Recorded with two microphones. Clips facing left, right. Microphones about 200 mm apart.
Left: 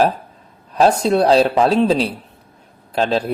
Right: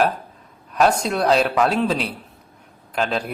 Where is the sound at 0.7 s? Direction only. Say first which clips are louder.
Left 4 dB; 30° left (ahead or behind).